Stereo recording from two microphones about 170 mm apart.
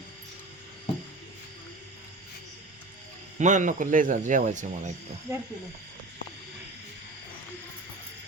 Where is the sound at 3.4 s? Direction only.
45° right (ahead or behind).